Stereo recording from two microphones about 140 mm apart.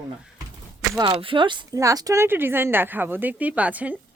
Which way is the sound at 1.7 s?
25° right (ahead or behind).